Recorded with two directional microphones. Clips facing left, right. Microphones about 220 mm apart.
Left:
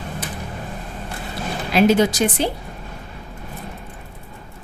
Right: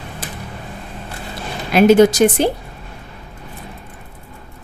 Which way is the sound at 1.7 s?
50° right (ahead or behind).